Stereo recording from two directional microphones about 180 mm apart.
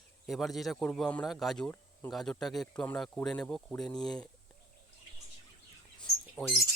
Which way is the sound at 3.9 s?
25° left (ahead or behind).